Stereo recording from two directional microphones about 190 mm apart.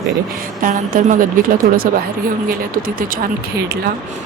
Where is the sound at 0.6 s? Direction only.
45° right (ahead or behind).